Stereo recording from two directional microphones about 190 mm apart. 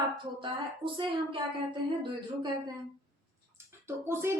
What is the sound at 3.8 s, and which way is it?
Speech, 15° right (ahead or behind).